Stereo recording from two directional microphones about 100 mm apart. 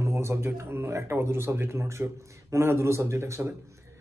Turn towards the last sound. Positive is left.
turn(degrees=-25)  # may be behind; listen again after turning